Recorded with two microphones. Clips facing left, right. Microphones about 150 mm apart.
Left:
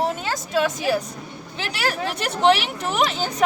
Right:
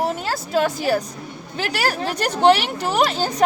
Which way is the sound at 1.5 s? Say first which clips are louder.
Right 3 dB; 40° right (ahead or behind).